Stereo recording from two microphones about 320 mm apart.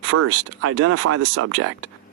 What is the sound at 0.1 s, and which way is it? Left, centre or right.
Speech, right.